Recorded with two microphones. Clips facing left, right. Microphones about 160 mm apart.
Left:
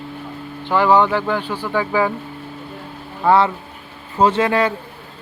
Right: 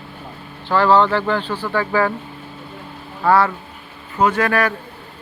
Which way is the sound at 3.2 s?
20° left (ahead or behind).